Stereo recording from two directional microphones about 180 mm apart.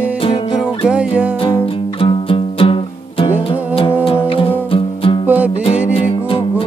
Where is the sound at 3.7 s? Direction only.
30° left (ahead or behind).